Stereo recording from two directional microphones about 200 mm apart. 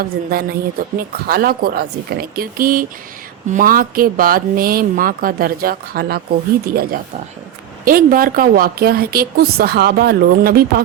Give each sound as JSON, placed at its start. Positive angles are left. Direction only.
{"t": 0.0, "sound": "a woman's voice", "side_deg": -50}